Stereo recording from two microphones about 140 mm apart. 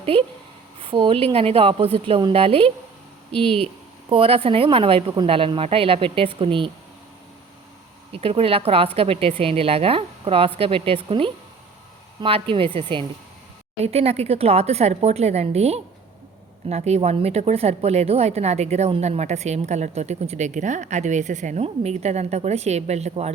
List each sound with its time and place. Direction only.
0.0 s a woman's voice: 45° right (ahead or behind)
4.1 s speech: 40° right (ahead or behind)
8.1 s a woman's voice: 45° right (ahead or behind)